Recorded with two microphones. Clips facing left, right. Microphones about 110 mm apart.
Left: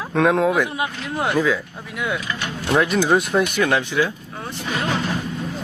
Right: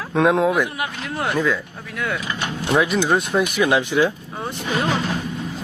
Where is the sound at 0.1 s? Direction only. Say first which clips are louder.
Right 1 dB; centre (ahead or behind).